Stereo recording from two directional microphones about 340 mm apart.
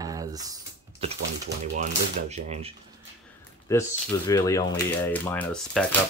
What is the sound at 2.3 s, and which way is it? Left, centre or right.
Speech, centre.